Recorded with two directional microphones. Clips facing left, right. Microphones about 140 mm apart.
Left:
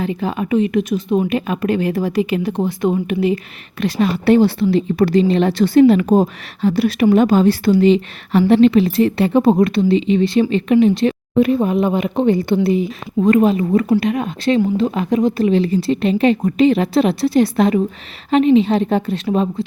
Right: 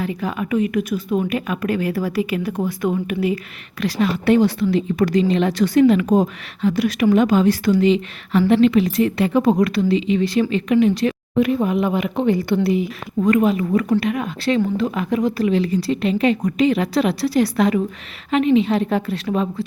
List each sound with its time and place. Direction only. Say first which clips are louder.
0.0 s a woman's voice: left 3 dB; 25° left (ahead or behind)